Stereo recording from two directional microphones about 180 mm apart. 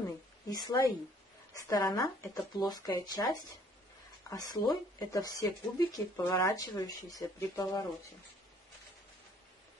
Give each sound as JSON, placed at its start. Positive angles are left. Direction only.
{"t": 0.5, "sound": "speech", "side_deg": 20}
{"t": 4.3, "sound": "speech", "side_deg": 20}